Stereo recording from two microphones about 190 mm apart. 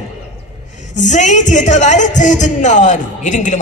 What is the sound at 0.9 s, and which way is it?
A man's voice, 40° left (ahead or behind).